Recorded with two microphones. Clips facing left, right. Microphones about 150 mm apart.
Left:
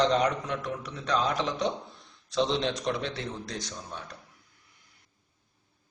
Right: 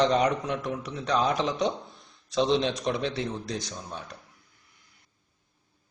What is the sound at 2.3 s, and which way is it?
A man's voice, 15° right (ahead or behind).